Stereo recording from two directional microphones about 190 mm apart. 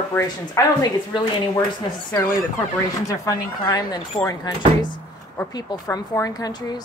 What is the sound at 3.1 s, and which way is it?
Speech, 20° left (ahead or behind).